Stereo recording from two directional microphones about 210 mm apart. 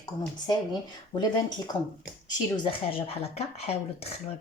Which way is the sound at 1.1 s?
20° left (ahead or behind).